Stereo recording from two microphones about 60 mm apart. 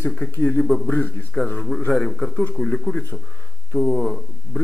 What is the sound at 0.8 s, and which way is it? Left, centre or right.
Speech, left.